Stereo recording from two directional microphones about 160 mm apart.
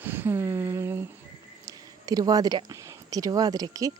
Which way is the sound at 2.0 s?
25° right (ahead or behind).